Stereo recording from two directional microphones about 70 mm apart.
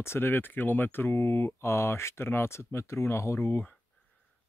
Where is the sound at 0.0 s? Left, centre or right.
Left.